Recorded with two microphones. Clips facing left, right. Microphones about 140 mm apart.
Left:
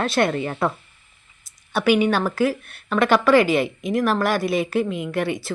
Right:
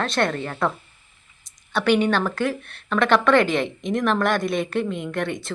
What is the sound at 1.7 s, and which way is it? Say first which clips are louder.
Speech: left 1 dB; 5° left (ahead or behind).